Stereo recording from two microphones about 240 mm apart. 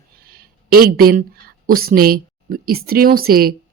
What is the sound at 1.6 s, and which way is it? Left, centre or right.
Speech, right.